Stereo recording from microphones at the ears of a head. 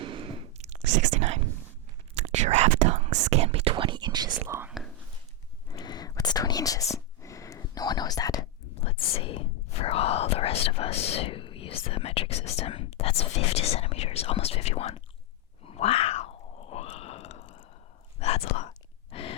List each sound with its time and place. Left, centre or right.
0.0 s whispering: right
5.6 s whispering: left
15.6 s grunt: left
18.2 s whispering: left